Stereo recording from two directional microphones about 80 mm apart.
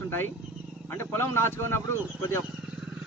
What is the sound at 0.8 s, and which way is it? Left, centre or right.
A man's voice, left.